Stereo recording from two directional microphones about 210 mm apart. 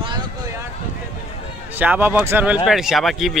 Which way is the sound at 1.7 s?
10° right (ahead or behind).